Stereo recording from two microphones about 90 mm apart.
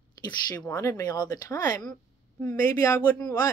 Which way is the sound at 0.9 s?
40° left (ahead or behind).